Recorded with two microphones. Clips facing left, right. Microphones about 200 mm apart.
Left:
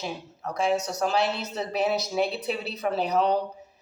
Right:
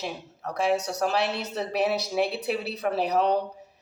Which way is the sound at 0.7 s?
60° right (ahead or behind).